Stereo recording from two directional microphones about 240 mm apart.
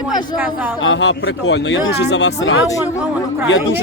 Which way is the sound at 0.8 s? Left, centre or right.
Left.